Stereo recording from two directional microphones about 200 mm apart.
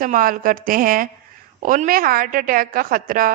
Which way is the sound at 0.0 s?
45° right (ahead or behind).